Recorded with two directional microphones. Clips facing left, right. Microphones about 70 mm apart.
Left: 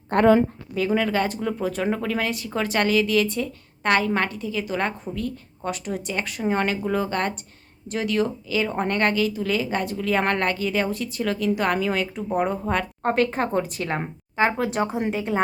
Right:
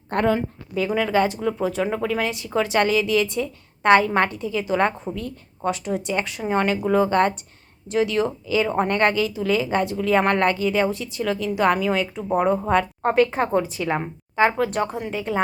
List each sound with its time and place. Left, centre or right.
1.1 s a woman's voice: centre
14.7 s speech: centre
15.1 s a woman's voice: centre